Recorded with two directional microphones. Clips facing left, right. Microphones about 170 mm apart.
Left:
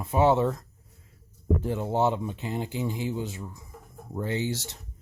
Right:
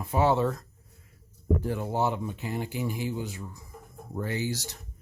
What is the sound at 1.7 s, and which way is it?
Speech, 25° left (ahead or behind).